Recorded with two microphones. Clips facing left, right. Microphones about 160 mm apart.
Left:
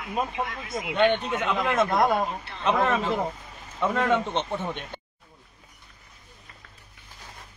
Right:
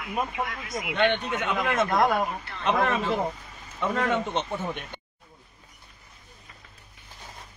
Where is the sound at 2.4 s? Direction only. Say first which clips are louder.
Left 1 dB; 25° left (ahead or behind).